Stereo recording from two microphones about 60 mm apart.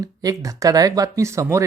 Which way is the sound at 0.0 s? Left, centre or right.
Right.